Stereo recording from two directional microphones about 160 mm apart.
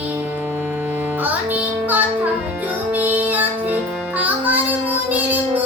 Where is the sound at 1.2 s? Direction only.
10° right (ahead or behind).